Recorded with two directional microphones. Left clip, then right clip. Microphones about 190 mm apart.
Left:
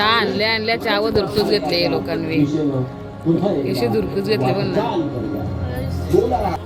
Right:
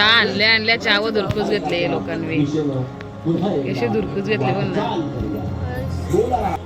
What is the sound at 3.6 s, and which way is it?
Speech, 10° left (ahead or behind).